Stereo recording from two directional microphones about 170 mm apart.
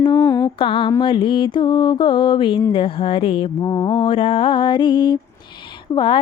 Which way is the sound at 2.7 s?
30° left (ahead or behind).